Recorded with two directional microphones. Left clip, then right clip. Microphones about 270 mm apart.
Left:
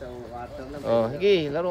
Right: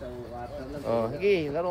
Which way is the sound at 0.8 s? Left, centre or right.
Left.